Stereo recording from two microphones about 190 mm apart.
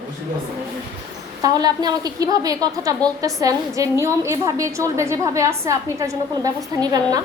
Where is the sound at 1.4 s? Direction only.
20° right (ahead or behind).